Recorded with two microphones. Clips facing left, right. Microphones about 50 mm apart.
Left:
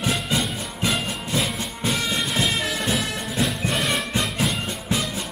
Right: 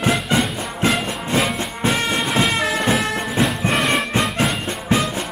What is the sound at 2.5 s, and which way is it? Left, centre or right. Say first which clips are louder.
Music: right 6 dB; right.